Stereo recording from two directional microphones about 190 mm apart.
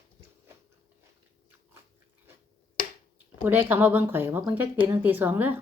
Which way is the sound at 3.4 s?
10° right (ahead or behind).